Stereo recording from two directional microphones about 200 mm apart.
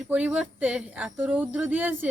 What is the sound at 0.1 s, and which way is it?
Speech, 5° right (ahead or behind).